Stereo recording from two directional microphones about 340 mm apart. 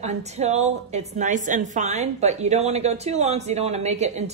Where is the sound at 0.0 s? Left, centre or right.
Centre.